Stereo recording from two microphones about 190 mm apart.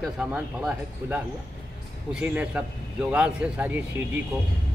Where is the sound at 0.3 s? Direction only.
5° right (ahead or behind).